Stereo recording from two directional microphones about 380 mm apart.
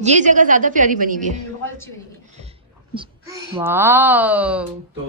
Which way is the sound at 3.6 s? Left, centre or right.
Centre.